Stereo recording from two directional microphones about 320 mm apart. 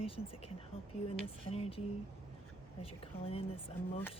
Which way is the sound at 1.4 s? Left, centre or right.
Centre.